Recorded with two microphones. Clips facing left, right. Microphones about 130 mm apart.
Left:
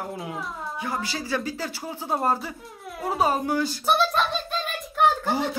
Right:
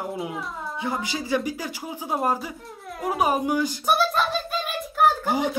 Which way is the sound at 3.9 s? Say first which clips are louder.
Even; 5° right (ahead or behind).